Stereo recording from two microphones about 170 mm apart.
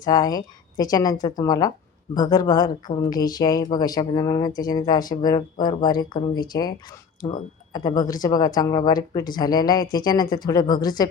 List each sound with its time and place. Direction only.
0.0 s speech: 20° left (ahead or behind)